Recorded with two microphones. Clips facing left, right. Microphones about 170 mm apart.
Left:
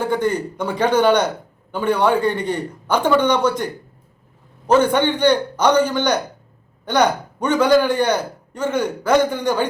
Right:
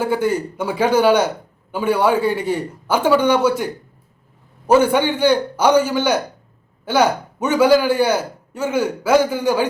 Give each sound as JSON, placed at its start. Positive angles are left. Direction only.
{"t": 0.0, "sound": "a man's voice", "side_deg": -10}